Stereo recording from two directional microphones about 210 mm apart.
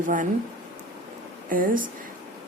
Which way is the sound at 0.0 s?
40° right (ahead or behind).